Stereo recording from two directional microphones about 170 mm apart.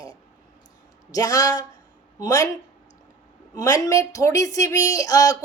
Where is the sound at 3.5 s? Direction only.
20° left (ahead or behind).